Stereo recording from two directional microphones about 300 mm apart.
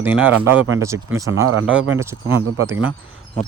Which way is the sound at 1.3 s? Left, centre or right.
Right.